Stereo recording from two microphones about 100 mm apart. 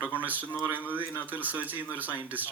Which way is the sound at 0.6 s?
20° left (ahead or behind).